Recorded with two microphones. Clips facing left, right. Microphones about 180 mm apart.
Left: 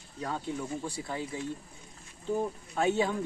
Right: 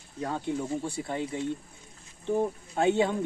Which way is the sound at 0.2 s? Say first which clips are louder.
Right 4 dB; 25° right (ahead or behind).